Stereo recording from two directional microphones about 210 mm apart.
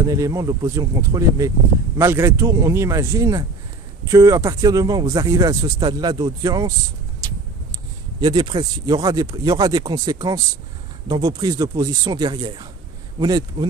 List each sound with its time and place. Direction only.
0.0 s speech: 15° right (ahead or behind)
8.2 s speech: 20° right (ahead or behind)